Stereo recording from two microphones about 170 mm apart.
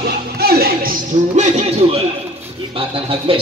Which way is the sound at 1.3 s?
40° right (ahead or behind).